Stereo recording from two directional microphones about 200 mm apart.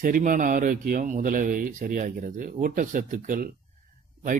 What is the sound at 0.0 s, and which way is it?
Speech, 45° right (ahead or behind).